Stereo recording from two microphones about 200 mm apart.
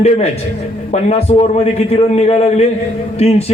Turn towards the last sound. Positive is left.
turn(degrees=30)  # may be behind; listen again after turning